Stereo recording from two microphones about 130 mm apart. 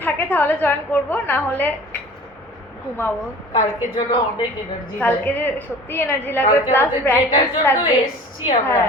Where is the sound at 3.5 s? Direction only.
35° left (ahead or behind).